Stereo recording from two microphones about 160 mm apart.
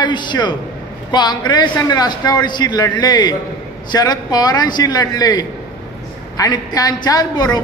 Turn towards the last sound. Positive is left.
turn(degrees=25)  # may be behind; listen again after turning